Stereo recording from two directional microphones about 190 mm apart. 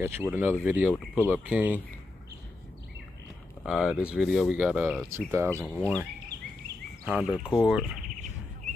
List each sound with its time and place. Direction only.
0.0 s speech: 10° right (ahead or behind)
3.6 s speech: 5° right (ahead or behind)
7.1 s speech: 5° right (ahead or behind)